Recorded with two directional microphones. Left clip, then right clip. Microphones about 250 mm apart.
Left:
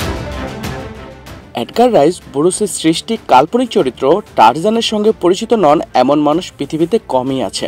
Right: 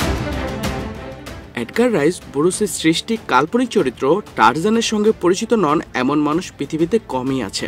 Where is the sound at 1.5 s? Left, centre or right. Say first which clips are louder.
Left 7 dB; right.